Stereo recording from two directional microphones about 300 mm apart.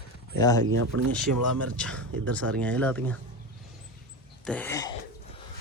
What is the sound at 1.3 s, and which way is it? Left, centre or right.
Speech, right.